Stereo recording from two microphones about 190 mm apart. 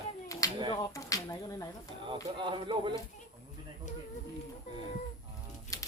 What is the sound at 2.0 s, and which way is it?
Speech, 25° right (ahead or behind).